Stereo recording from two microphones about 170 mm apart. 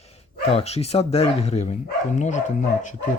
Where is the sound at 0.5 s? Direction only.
35° left (ahead or behind).